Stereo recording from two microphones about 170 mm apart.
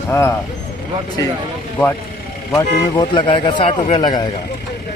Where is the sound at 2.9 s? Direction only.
25° left (ahead or behind).